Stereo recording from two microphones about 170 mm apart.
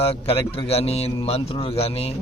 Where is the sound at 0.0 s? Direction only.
35° left (ahead or behind).